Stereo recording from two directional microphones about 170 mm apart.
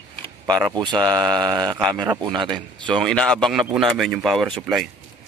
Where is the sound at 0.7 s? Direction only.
25° right (ahead or behind).